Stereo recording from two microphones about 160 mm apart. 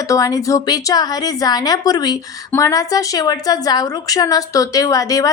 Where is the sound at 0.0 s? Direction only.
20° left (ahead or behind).